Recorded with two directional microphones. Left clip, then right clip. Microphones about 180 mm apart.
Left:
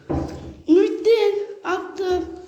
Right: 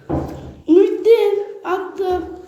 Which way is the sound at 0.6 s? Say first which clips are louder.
Right 4 dB; centre (ahead or behind).